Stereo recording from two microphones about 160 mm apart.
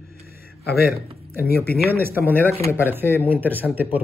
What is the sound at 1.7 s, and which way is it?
Speech, 75° left (ahead or behind).